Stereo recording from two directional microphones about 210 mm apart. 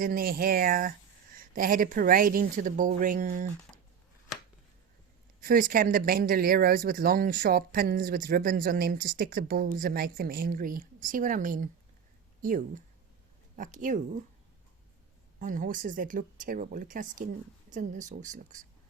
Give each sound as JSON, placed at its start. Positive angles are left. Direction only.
{"t": 0.0, "sound": "speech", "side_deg": -45}
{"t": 5.4, "sound": "speech", "side_deg": -40}
{"t": 15.4, "sound": "speech", "side_deg": -40}